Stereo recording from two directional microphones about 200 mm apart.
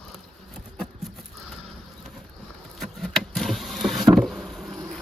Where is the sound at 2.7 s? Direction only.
Centre (ahead or behind).